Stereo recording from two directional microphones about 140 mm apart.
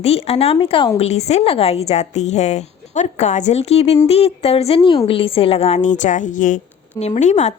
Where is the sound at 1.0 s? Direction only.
50° left (ahead or behind).